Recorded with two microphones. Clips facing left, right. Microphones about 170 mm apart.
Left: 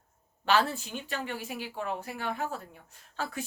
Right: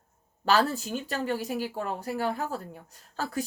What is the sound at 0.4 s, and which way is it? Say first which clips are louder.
Speech: right 2 dB; 40° right (ahead or behind).